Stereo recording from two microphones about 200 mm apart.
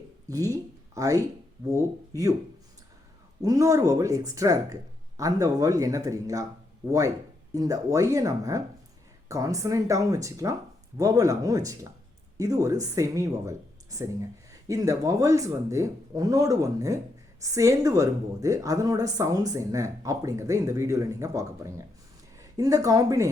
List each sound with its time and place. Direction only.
0.3 s speech: 15° right (ahead or behind)
3.4 s a woman's voice: 15° right (ahead or behind)